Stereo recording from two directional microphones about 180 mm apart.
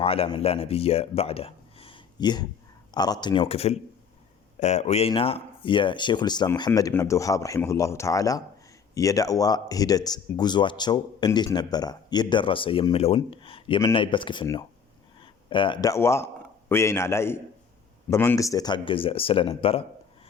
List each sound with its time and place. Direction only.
0.0 s speech: 30° left (ahead or behind)